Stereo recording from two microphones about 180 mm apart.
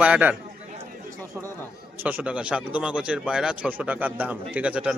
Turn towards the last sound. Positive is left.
turn(degrees=-5)  # may be behind; listen again after turning